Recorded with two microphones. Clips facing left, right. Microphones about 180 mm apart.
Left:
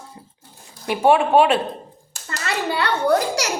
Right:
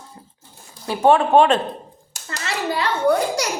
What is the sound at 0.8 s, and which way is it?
Speech, 15° left (ahead or behind).